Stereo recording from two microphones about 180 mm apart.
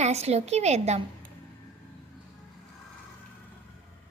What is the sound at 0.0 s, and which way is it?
A woman's voice, 35° right (ahead or behind).